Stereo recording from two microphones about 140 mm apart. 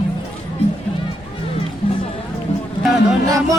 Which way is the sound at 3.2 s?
25° right (ahead or behind).